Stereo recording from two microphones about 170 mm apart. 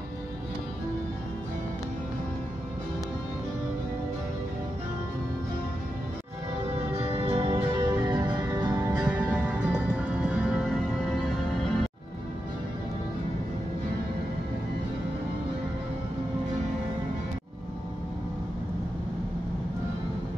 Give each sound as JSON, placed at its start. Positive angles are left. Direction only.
{"t": 7.0, "sound": "music", "side_deg": -35}
{"t": 7.9, "sound": "music", "side_deg": -15}
{"t": 8.7, "sound": "music", "side_deg": -10}